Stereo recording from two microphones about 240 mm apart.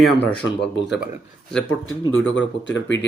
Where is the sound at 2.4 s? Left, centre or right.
Left.